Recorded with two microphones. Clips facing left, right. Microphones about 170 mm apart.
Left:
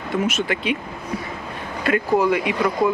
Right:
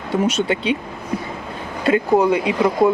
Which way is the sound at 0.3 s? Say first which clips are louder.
Right 3 dB; 30° right (ahead or behind).